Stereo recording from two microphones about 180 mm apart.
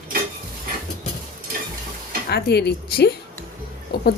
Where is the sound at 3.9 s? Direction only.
60° left (ahead or behind).